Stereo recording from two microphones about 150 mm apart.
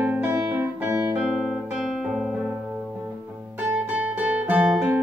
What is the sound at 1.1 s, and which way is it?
Music, centre (ahead or behind).